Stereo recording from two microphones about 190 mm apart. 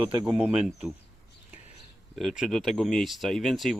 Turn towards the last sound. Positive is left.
turn(degrees=0)  # may be behind; listen again after turning